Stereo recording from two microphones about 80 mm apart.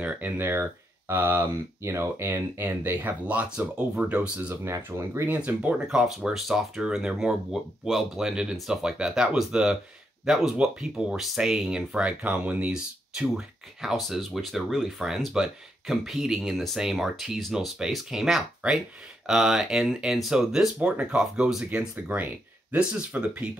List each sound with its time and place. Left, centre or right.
0.0 s speech: right
4.6 s speech: right
5.3 s speech: right
21.6 s speech: centre